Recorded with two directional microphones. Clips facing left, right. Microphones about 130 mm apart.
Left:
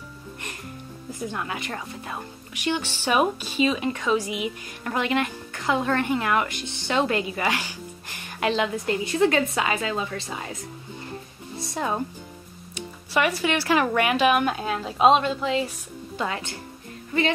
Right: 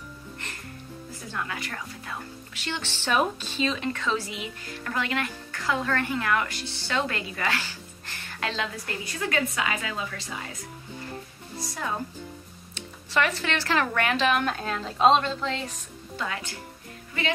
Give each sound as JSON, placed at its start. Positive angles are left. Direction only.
{"t": 1.3, "sound": "speech", "side_deg": 20}
{"t": 12.7, "sound": "speech", "side_deg": 10}
{"t": 16.2, "sound": "speech", "side_deg": 25}